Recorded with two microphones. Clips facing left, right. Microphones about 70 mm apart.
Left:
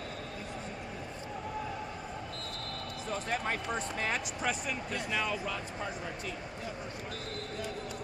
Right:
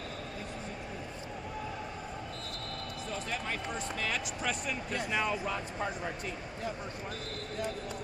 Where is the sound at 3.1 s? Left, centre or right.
Left.